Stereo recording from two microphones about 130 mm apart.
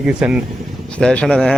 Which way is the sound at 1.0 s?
5° left (ahead or behind).